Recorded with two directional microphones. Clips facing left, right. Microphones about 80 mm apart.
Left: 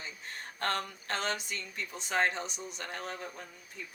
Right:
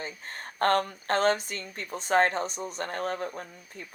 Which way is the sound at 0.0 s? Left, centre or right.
Right.